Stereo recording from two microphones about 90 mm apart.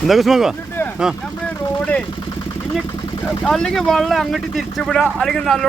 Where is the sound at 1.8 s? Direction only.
15° left (ahead or behind).